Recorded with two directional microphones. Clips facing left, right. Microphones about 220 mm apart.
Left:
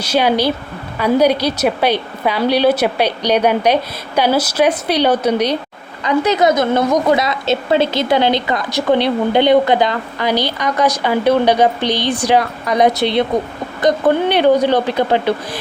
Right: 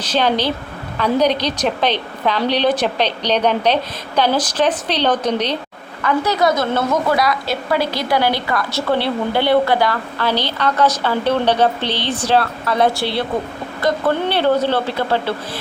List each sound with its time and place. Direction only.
0.0 s a woman's voice: 10° left (ahead or behind)